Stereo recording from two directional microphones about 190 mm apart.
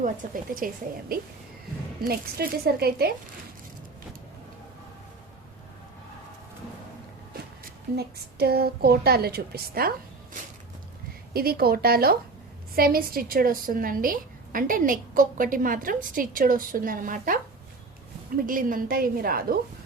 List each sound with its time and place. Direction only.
0.2 s a woman's voice: 45° right (ahead or behind)
7.3 s speech: 55° right (ahead or behind)
11.3 s a woman's voice: 50° right (ahead or behind)
18.4 s a woman's voice: 45° right (ahead or behind)